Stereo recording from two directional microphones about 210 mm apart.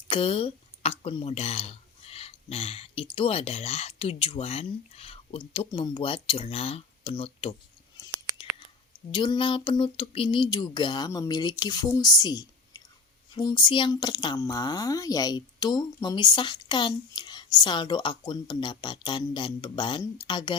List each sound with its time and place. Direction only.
0.1 s speech: 25° left (ahead or behind)
9.1 s speech: 20° left (ahead or behind)